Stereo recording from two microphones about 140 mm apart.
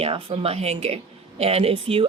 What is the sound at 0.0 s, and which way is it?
Speech, 40° right (ahead or behind).